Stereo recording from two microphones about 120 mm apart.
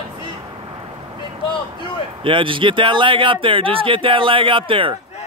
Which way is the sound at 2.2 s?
45° right (ahead or behind).